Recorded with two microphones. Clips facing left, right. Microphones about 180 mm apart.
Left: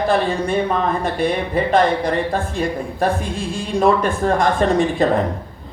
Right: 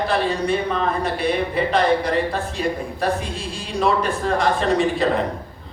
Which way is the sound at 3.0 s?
50° left (ahead or behind).